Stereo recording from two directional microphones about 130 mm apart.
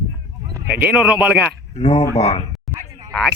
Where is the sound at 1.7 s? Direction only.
55° left (ahead or behind).